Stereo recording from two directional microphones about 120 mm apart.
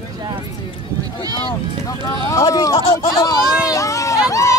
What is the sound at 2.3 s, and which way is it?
Speech, 30° left (ahead or behind).